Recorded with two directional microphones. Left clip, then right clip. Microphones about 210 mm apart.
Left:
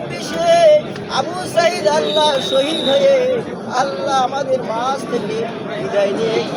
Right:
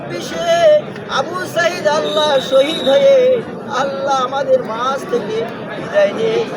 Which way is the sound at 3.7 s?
20° right (ahead or behind).